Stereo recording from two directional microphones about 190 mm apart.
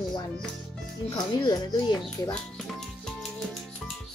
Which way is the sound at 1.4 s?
20° left (ahead or behind).